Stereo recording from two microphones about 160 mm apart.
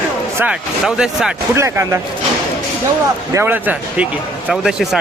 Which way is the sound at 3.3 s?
15° right (ahead or behind).